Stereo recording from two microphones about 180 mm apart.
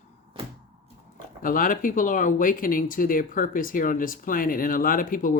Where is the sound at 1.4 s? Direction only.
50° left (ahead or behind).